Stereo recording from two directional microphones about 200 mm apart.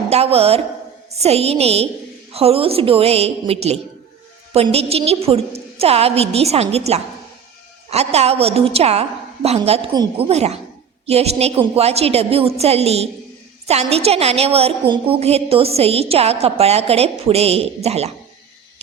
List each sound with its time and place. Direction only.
0.1 s a woman's voice: 30° right (ahead or behind)